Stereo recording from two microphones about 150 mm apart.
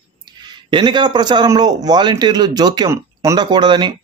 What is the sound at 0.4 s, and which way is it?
A man's voice, 30° right (ahead or behind).